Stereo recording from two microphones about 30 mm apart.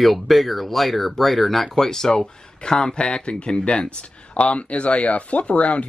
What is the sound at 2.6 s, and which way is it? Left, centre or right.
Speech, left.